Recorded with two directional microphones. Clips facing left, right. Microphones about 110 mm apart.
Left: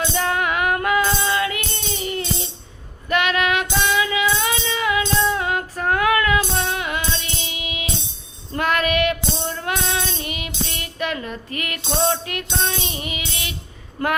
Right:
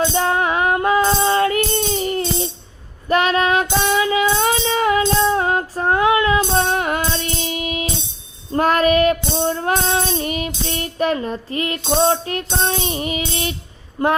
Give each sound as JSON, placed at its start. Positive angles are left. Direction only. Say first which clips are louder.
{"t": 0.0, "sound": "music", "louder": "right 4 dB", "side_deg": -30}
{"t": 3.1, "sound": "child singing", "louder": "right 4 dB", "side_deg": -35}
{"t": 5.2, "sound": "female singing", "louder": "right 4 dB", "side_deg": -35}
{"t": 8.5, "sound": "child singing", "louder": "right 5 dB", "side_deg": -35}
{"t": 14.0, "sound": "a sound", "louder": "right 5 dB", "side_deg": -25}